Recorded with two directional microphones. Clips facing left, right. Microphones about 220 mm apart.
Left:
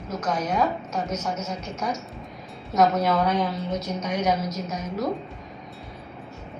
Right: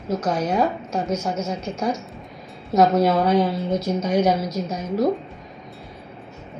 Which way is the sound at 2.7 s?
30° right (ahead or behind).